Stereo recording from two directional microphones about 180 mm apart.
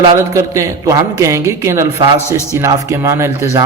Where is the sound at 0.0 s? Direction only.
20° right (ahead or behind).